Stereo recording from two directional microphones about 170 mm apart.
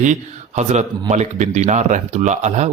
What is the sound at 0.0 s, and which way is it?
Speech, 45° right (ahead or behind).